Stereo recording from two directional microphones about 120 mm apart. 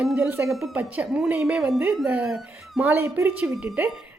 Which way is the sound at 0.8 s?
15° right (ahead or behind).